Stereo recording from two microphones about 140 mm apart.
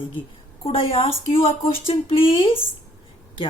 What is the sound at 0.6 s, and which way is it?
A woman's voice, 40° left (ahead or behind).